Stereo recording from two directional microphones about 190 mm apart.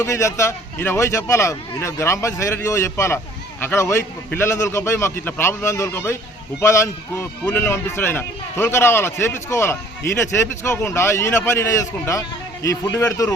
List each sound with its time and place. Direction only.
0.0 s a man's voice: 15° left (ahead or behind)